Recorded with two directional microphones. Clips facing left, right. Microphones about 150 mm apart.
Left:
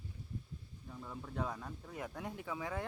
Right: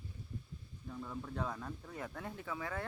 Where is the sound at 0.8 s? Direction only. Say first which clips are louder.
Right 4 dB; 5° left (ahead or behind).